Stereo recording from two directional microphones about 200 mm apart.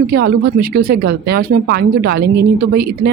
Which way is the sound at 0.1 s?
50° right (ahead or behind).